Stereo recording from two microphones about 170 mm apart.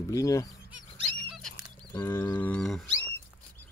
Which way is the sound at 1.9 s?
15° left (ahead or behind).